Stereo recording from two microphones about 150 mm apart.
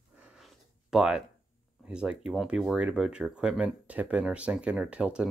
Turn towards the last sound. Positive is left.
turn(degrees=-5)  # may be behind; listen again after turning